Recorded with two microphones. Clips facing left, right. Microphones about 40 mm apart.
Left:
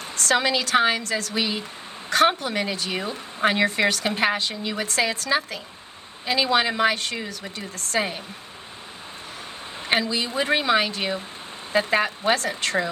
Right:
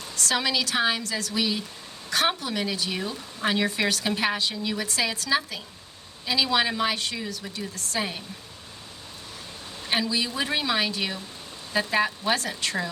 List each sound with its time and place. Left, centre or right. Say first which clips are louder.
0.0 s speech: left 5 dB; left
10.1 s speech: left 4 dB; left